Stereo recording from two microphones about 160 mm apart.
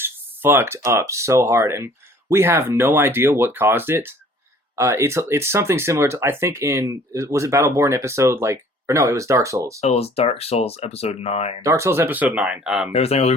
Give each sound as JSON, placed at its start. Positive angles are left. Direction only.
{"t": 0.0, "sound": "speech", "side_deg": -15}
{"t": 9.8, "sound": "speech", "side_deg": 40}
{"t": 11.6, "sound": "speech", "side_deg": -15}
{"t": 12.9, "sound": "speech", "side_deg": 40}